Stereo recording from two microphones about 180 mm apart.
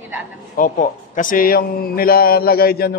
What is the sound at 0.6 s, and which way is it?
A man's voice, 45° left (ahead or behind).